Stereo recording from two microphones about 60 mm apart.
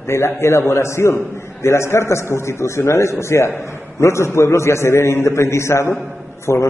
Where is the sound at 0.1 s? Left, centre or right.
Left.